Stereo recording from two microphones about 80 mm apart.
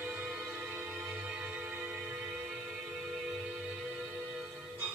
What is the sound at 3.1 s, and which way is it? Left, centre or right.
Music, centre.